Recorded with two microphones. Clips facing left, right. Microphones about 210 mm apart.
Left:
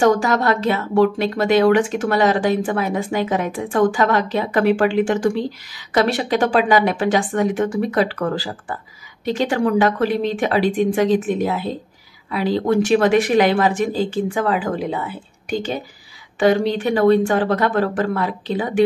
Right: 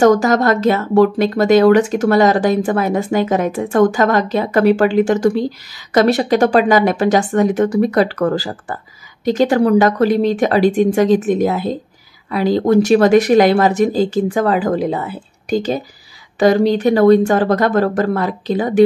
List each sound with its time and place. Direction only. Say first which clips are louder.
0.0 s speech: right 5 dB; 40° right (ahead or behind)